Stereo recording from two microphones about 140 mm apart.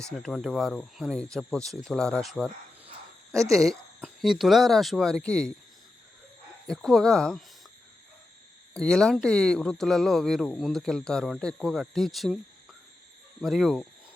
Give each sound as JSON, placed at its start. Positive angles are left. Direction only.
{"t": 0.2, "sound": "speech", "side_deg": 0}
{"t": 3.3, "sound": "speech", "side_deg": -20}
{"t": 3.6, "sound": "speech", "side_deg": 0}
{"t": 6.7, "sound": "speech", "side_deg": 5}
{"t": 8.7, "sound": "speech", "side_deg": 5}
{"t": 13.4, "sound": "speech", "side_deg": 0}